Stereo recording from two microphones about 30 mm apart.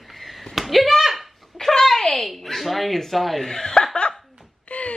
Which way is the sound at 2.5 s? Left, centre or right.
Centre.